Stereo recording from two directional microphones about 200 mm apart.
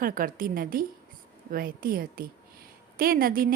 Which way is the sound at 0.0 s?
45° right (ahead or behind).